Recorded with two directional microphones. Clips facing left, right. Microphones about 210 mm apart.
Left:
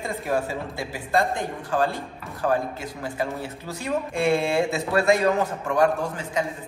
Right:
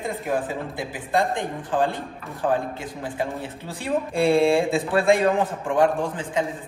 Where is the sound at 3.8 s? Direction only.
30° right (ahead or behind).